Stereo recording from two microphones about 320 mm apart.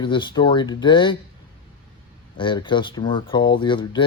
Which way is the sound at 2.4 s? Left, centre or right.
Centre.